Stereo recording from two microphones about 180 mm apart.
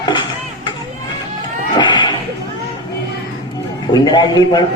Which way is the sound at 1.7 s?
25° left (ahead or behind).